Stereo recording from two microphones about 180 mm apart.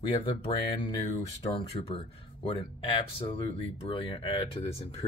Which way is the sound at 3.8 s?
30° left (ahead or behind).